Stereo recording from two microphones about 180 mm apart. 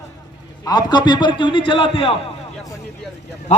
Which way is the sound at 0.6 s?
25° left (ahead or behind).